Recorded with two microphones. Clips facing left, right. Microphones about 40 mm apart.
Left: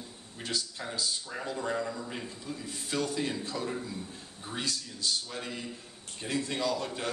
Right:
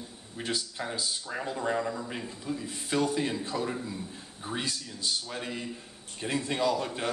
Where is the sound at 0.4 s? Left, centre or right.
Centre.